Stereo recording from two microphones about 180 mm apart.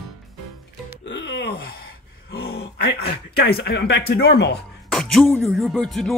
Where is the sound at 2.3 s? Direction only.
65° left (ahead or behind).